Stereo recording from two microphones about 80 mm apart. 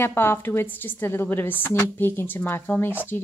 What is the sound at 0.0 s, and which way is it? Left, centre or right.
A woman's voice, left.